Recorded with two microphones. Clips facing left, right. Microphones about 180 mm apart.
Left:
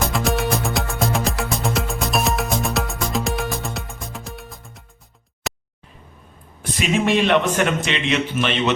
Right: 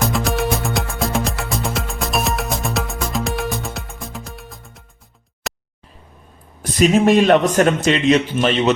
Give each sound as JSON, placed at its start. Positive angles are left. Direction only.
{"t": 0.0, "sound": "music", "side_deg": 0}
{"t": 5.5, "sound": "a sound", "side_deg": 0}
{"t": 6.6, "sound": "a man's voice", "side_deg": -40}